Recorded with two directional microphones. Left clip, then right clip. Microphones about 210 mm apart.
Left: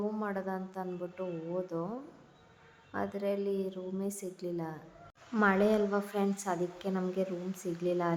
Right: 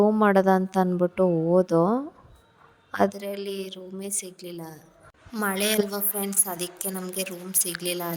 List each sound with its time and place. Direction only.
0.0 s mantra: 45° right (ahead or behind)
2.9 s a woman's voice: 45° right (ahead or behind)
3.3 s mantra: 45° right (ahead or behind)
5.3 s a woman's voice: centre (ahead or behind)